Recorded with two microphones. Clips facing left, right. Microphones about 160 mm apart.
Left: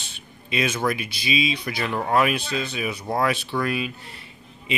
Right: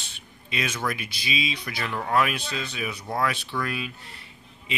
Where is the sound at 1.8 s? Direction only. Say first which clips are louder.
Left 4 dB; 25° left (ahead or behind).